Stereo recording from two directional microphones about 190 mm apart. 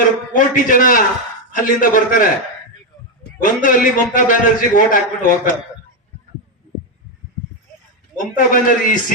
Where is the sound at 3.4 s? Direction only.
45° left (ahead or behind).